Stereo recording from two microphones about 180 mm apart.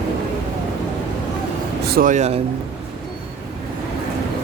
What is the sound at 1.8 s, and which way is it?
Speech, 55° right (ahead or behind).